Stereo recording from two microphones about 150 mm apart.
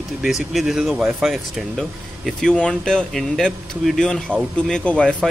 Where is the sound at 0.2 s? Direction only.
Centre (ahead or behind).